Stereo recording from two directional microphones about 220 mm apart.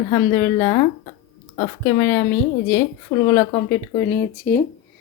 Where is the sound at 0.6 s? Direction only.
25° left (ahead or behind).